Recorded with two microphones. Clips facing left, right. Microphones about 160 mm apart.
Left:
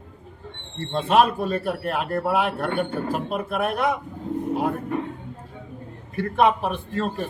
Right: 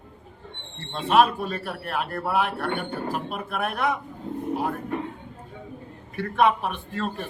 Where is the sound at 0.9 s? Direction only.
40° left (ahead or behind).